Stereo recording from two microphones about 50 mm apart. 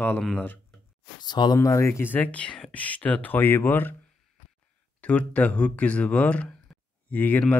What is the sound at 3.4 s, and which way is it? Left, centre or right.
Speech, left.